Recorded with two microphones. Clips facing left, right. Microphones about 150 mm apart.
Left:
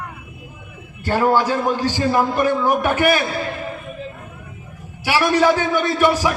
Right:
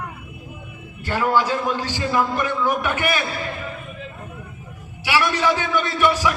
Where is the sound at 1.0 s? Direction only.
40° left (ahead or behind).